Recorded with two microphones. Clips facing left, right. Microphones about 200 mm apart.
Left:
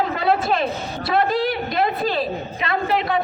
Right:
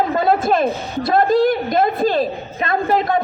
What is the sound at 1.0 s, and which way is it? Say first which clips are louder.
A woman's voice: right 6 dB; 45° right (ahead or behind).